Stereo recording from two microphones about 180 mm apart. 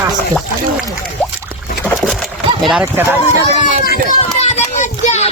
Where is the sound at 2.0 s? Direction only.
Centre (ahead or behind).